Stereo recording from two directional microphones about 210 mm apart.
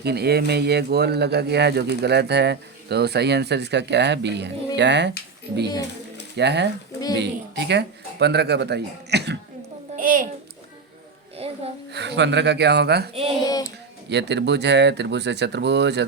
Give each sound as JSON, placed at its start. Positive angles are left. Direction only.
{"t": 0.0, "sound": "speech", "side_deg": -50}
{"t": 6.3, "sound": "speech", "side_deg": -55}
{"t": 9.9, "sound": "babbling", "side_deg": -40}
{"t": 11.3, "sound": "music", "side_deg": -30}
{"t": 11.9, "sound": "speech", "side_deg": -55}
{"t": 13.4, "sound": "child singing", "side_deg": 15}
{"t": 13.7, "sound": "speech", "side_deg": -55}